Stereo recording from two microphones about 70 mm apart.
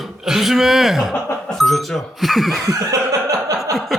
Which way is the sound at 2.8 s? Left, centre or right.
Right.